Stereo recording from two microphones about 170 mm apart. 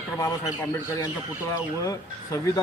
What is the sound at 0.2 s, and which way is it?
A man's voice, 20° left (ahead or behind).